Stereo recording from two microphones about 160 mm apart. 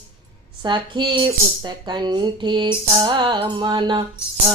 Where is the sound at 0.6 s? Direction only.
30° right (ahead or behind).